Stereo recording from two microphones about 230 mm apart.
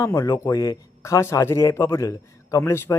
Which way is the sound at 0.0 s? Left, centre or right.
Centre.